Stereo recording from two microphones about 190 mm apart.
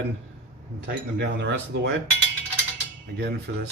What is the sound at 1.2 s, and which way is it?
Speech, 70° right (ahead or behind).